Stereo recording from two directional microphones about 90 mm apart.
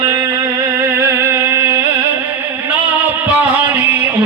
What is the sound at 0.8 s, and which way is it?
Music, 30° right (ahead or behind).